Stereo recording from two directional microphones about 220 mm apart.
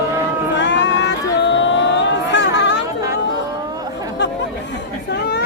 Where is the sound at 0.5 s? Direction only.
55° left (ahead or behind).